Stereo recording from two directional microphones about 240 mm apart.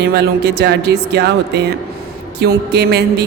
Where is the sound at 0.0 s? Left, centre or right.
Right.